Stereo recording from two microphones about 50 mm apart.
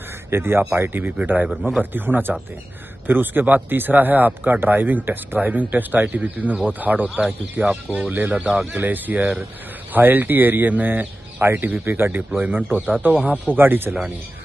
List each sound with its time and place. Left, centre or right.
0.3 s speech: right
11.4 s speech: right